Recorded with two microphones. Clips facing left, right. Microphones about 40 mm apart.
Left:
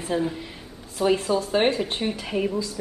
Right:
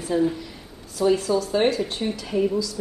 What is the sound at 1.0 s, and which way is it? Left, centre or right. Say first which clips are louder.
Speech: right 1 dB; left.